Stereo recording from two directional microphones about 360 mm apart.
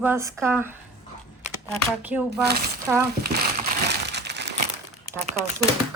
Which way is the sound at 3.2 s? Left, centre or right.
Right.